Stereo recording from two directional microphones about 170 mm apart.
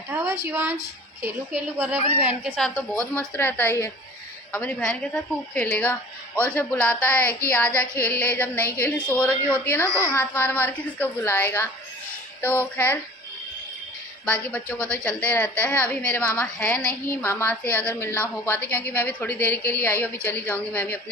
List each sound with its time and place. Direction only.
0.1 s a sound: 15° right (ahead or behind)
1.2 s a woman's voice: 10° right (ahead or behind)
2.6 s a woman's voice: 5° left (ahead or behind)
14.3 s a woman's voice: 10° left (ahead or behind)